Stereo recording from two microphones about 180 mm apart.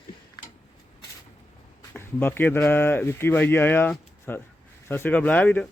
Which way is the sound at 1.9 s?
10° left (ahead or behind).